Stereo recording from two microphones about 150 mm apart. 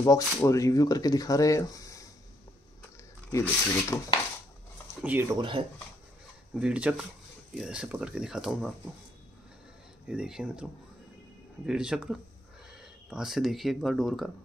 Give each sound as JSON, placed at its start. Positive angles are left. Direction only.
{"t": 0.0, "sound": "speech", "side_deg": 20}
{"t": 3.3, "sound": "speech", "side_deg": 20}
{"t": 5.0, "sound": "speech", "side_deg": -15}
{"t": 5.4, "sound": "speech", "side_deg": -35}
{"t": 6.6, "sound": "speech", "side_deg": -10}
{"t": 10.0, "sound": "speech", "side_deg": -5}